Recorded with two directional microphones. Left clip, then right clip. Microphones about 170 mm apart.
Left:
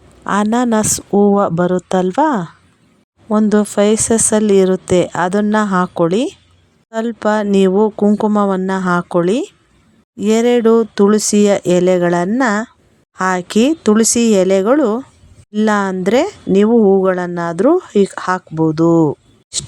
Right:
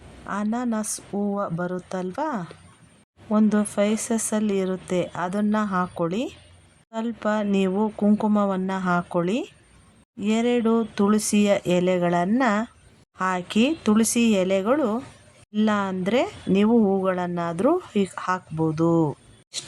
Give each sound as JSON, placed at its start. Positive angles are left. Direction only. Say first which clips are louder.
{"t": 0.3, "sound": "speech", "louder": "left 13 dB", "side_deg": 60}
{"t": 3.2, "sound": "speech", "louder": "left 9 dB", "side_deg": 40}